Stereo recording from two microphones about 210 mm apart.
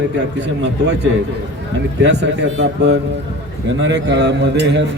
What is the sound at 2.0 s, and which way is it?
Speech, 55° right (ahead or behind).